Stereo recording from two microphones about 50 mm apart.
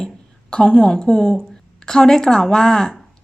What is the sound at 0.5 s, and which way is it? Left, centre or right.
A woman's voice, centre.